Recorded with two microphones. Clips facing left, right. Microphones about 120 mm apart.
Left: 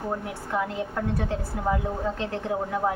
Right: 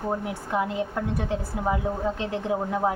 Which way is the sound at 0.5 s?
20° right (ahead or behind).